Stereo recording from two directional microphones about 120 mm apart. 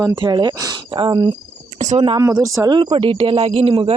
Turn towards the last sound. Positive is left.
turn(degrees=-50)  # may be behind; listen again after turning